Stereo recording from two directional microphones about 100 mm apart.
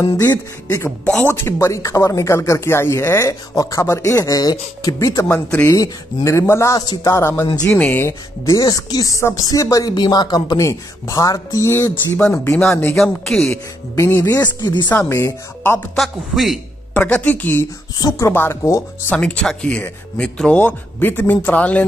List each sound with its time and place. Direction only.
0.3 s speech: 30° left (ahead or behind)
1.0 s speech: 20° left (ahead or behind); by 5.2 s 35° left (ahead or behind)
5.3 s speech: 15° left (ahead or behind)
5.7 s speech: 30° left (ahead or behind)
8.5 s speech: 35° left (ahead or behind)
12.9 s speech: 5° left (ahead or behind)
13.5 s speech: 25° left (ahead or behind)
14.4 s speech: 45° left (ahead or behind)
15.0 s speech: 30° left (ahead or behind)
16.0 s speech: centre (ahead or behind)
16.9 s speech: 15° left (ahead or behind)
17.9 s speech: 40° left (ahead or behind)
18.3 s speech: 25° left (ahead or behind)
19.0 s speech: 10° left (ahead or behind)